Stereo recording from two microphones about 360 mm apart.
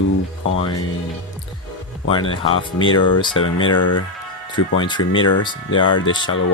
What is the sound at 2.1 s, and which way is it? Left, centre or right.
Speech, centre.